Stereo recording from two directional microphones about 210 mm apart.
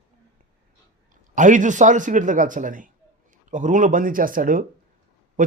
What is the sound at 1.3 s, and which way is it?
A man's voice, 40° right (ahead or behind).